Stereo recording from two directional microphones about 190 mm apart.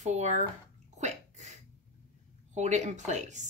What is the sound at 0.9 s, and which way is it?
Sneeze, 40° right (ahead or behind).